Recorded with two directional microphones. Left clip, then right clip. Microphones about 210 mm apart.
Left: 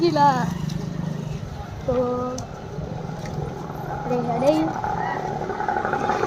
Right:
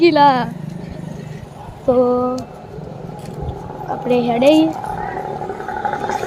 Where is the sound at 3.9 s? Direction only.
40° right (ahead or behind).